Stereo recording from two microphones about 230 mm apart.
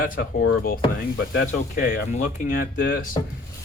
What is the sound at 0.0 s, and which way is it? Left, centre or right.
Speech, left.